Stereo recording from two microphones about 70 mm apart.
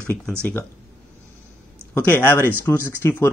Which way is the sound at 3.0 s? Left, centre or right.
Left.